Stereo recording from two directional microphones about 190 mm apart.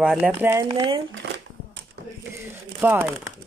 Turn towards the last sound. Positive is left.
turn(degrees=-10)  # may be behind; listen again after turning